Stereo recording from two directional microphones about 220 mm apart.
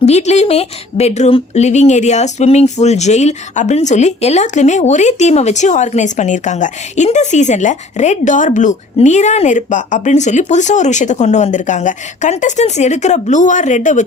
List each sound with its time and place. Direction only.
0.0 s speech: 30° left (ahead or behind)